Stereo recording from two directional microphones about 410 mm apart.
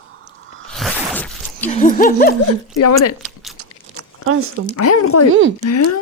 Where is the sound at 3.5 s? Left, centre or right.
Right.